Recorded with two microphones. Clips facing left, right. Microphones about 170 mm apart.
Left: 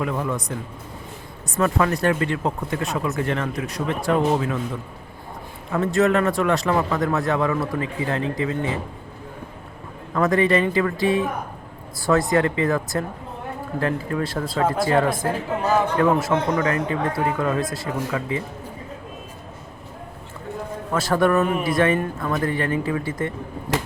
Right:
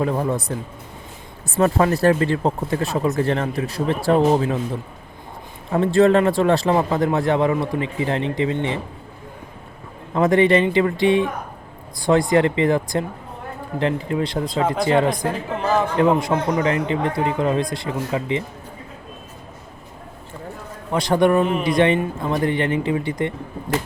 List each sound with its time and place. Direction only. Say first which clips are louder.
0.0 s a man's voice: right 4 dB; 35° right (ahead or behind)
1.5 s a man's voice: right 3 dB; 30° right (ahead or behind)
10.2 s a man's voice: right 3 dB; 25° right (ahead or behind)
12.3 s a man's voice: right 3 dB; 25° right (ahead or behind)
20.9 s a man's voice: right 2 dB; 20° right (ahead or behind)